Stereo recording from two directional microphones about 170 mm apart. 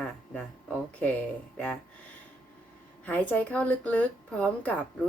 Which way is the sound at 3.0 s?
10° left (ahead or behind).